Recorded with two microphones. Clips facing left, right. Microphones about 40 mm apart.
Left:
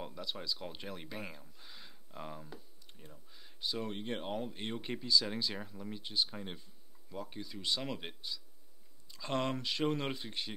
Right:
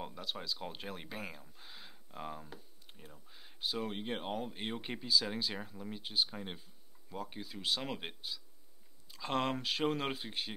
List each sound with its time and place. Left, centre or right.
0.0 s speech: centre